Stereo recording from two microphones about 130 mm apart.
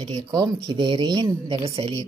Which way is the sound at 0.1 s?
30° right (ahead or behind).